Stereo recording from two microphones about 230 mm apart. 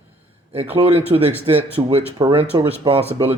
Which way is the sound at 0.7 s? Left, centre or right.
Right.